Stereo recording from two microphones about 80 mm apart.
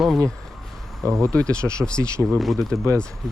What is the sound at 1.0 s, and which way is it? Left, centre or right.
Speech, right.